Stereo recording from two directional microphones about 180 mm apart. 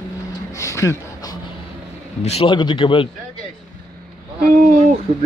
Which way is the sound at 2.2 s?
30° left (ahead or behind).